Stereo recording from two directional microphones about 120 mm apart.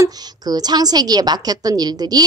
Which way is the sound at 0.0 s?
35° right (ahead or behind).